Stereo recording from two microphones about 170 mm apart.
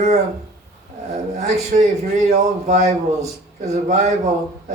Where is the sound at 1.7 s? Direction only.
50° right (ahead or behind).